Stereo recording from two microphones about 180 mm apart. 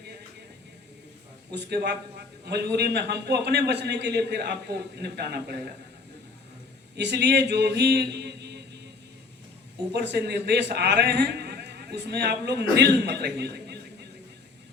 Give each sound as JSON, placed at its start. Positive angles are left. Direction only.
{"t": 1.5, "sound": "a man's voice", "side_deg": -70}
{"t": 6.9, "sound": "mantra", "side_deg": -70}
{"t": 9.9, "sound": "a man's voice", "side_deg": -70}